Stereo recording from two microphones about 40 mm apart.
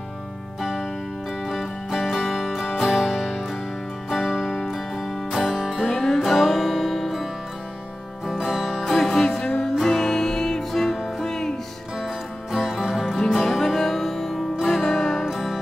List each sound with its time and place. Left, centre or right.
1.4 s music: centre
5.9 s music: centre
6.1 s music: centre
8.3 s music: centre
11.2 s music: centre
12.0 s music: centre
15.2 s music: centre